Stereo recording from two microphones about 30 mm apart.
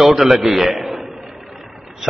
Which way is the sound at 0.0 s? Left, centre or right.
Centre.